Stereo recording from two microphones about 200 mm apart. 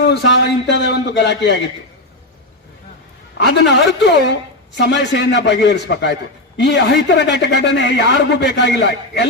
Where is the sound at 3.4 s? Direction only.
60° left (ahead or behind).